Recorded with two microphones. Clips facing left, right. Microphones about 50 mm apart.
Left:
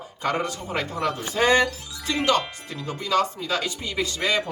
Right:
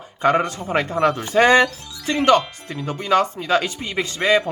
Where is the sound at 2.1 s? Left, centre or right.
Right.